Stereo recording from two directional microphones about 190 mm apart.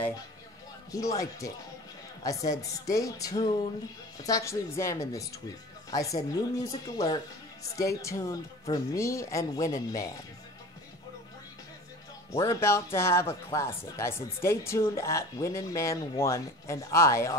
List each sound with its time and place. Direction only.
0.9 s speech: 15° left (ahead or behind)
12.4 s speech: 15° left (ahead or behind)